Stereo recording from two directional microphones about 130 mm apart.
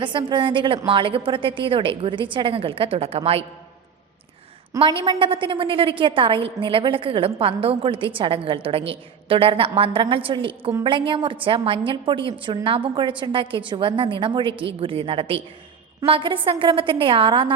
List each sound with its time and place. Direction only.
0.0 s a woman's voice: 40° right (ahead or behind)
4.9 s a woman's voice: 40° right (ahead or behind)